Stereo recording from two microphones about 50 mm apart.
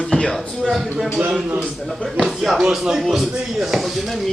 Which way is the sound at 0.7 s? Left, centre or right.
Centre.